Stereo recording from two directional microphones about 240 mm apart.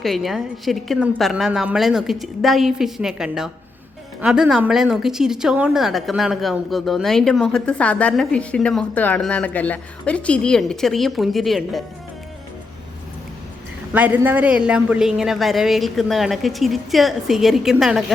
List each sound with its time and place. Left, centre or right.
0.0 s a woman's voice: centre
13.9 s a woman's voice: centre